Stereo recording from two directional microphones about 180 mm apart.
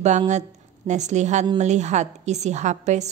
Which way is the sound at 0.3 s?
40° right (ahead or behind).